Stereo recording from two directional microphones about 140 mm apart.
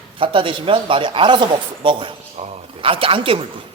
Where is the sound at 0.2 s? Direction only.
40° right (ahead or behind).